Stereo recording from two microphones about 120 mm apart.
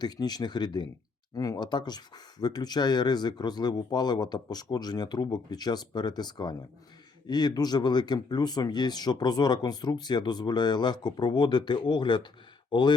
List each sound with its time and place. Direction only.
0.0 s speech: 35° left (ahead or behind)